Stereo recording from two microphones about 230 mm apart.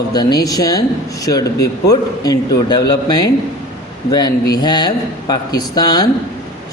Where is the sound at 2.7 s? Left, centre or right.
Centre.